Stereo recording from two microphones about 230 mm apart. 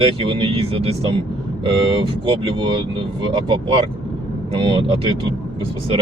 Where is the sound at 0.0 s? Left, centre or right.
Right.